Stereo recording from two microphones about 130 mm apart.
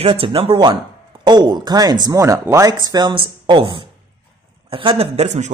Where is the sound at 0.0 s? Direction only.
45° right (ahead or behind); by 2.7 s 20° right (ahead or behind).